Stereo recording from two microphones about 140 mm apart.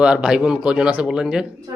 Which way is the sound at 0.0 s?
5° right (ahead or behind).